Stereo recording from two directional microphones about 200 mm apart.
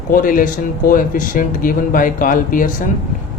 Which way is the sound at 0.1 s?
45° left (ahead or behind).